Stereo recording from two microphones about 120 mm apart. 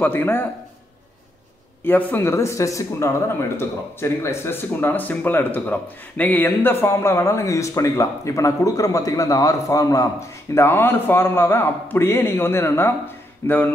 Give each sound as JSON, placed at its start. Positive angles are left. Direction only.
{"t": 0.0, "sound": "a man's voice", "side_deg": 15}
{"t": 1.9, "sound": "speech", "side_deg": 15}